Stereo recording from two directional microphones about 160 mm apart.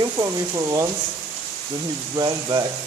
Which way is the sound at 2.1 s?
25° right (ahead or behind).